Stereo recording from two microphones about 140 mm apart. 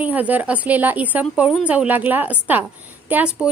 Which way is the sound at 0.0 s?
10° right (ahead or behind).